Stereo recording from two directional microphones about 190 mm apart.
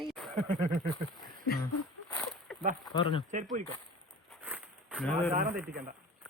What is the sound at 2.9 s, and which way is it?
Speech, 25° left (ahead or behind).